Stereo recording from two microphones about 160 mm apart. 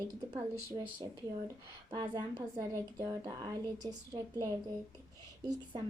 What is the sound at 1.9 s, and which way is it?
A woman's voice, 25° right (ahead or behind).